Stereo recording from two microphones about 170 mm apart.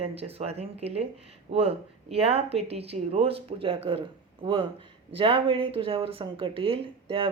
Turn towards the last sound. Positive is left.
turn(degrees=-30)  # may be behind; listen again after turning